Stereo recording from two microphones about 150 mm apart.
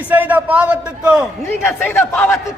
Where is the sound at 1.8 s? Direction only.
10° left (ahead or behind).